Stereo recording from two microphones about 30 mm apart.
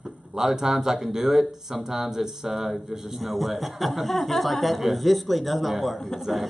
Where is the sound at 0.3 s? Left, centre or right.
Centre.